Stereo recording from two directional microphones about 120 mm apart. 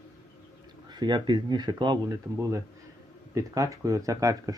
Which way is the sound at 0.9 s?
35° right (ahead or behind).